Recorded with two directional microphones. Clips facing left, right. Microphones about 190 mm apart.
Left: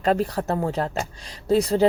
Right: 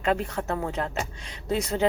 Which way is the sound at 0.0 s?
35° left (ahead or behind).